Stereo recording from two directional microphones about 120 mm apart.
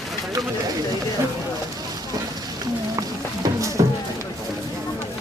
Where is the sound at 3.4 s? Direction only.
25° right (ahead or behind).